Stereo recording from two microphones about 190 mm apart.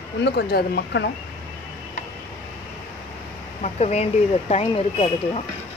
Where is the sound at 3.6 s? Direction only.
35° left (ahead or behind).